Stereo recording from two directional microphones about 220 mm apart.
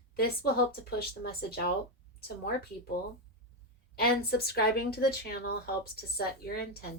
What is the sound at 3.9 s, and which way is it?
Speech, 45° left (ahead or behind).